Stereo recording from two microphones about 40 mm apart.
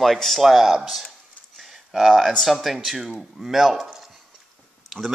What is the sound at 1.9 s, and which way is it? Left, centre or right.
Speech, centre.